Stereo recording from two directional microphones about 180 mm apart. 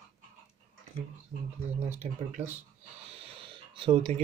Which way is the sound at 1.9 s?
40° right (ahead or behind).